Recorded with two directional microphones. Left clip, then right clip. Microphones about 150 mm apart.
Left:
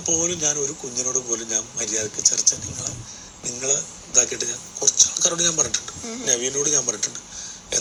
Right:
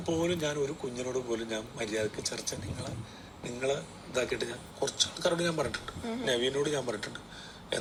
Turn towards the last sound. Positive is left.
turn(degrees=20)  # may be behind; listen again after turning